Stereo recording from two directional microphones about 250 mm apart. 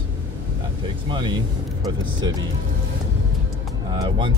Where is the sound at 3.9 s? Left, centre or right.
Centre.